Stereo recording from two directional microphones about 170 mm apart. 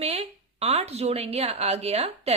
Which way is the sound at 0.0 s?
35° right (ahead or behind).